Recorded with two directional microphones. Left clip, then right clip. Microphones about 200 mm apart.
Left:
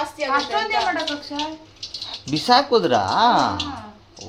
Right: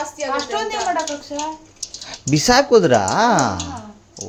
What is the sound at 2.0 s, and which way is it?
Speech, 50° right (ahead or behind).